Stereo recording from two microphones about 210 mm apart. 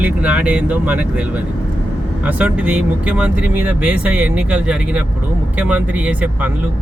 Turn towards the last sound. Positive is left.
turn(degrees=-5)  # may be behind; listen again after turning